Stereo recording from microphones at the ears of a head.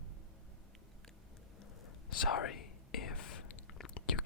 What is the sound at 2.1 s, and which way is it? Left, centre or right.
Whispering, left.